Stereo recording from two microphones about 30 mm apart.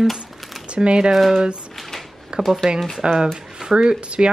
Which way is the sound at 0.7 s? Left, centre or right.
Right.